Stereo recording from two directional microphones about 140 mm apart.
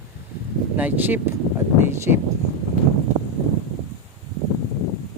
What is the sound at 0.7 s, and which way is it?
Speech, 10° right (ahead or behind).